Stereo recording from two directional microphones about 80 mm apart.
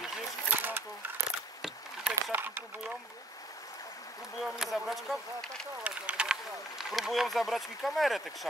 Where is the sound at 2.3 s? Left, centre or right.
Right.